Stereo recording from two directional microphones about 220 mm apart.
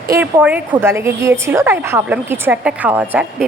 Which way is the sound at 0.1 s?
10° right (ahead or behind).